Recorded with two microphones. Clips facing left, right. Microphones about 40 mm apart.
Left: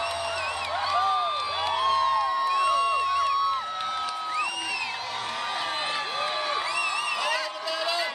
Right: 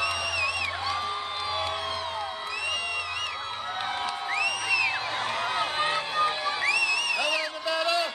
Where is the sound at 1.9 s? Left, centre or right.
Left.